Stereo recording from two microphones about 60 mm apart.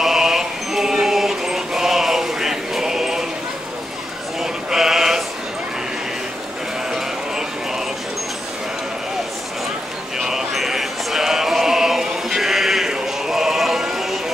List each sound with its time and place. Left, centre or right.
0.0 s music: centre
4.4 s sheep: centre
10.1 s music: centre